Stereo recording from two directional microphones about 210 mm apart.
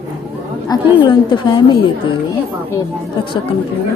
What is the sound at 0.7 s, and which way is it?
A woman's voice, 20° left (ahead or behind).